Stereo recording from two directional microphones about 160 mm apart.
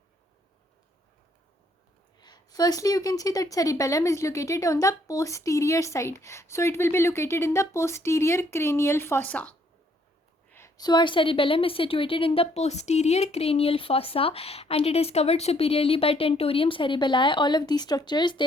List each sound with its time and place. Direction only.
2.2 s a woman's voice: 25° left (ahead or behind); by 9.6 s 10° left (ahead or behind)
10.5 s a sound: 15° left (ahead or behind)
10.8 s a woman's voice: 30° left (ahead or behind)